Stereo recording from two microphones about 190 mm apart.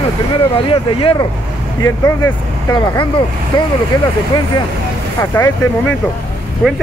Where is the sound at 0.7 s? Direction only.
25° left (ahead or behind).